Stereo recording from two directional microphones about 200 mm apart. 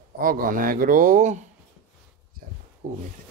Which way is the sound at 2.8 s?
35° right (ahead or behind).